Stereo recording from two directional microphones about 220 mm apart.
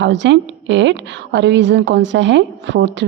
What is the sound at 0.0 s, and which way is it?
A woman's voice, 55° right (ahead or behind).